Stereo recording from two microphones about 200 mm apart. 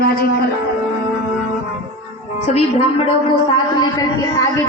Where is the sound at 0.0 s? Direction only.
50° left (ahead or behind).